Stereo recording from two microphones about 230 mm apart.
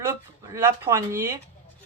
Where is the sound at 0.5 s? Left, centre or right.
Centre.